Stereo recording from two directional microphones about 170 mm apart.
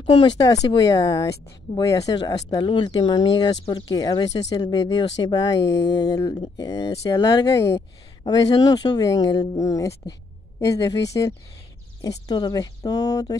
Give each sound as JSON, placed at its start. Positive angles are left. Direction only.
{"t": 0.5, "sound": "speech", "side_deg": 25}